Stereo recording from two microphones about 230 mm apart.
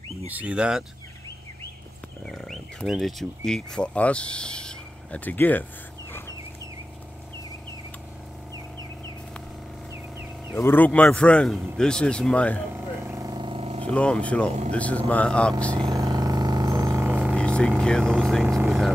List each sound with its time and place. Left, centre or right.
0.3 s speech: centre
2.2 s speech: centre
10.5 s speech: centre
12.7 s vehicle: centre
13.8 s speech: centre
15.7 s a sound: centre
17.4 s speech: centre